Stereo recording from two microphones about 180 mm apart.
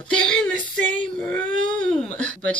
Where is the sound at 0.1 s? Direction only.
5° left (ahead or behind).